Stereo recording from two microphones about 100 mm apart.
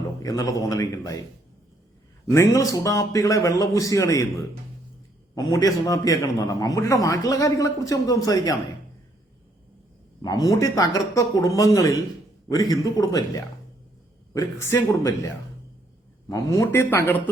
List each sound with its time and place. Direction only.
0.2 s a man's voice: 35° left (ahead or behind)
2.2 s a man's voice: 30° left (ahead or behind)
5.3 s a man's voice: 40° left (ahead or behind)
10.2 s a man's voice: 40° left (ahead or behind)
16.3 s a man's voice: 35° left (ahead or behind)
16.9 s speech: 25° left (ahead or behind)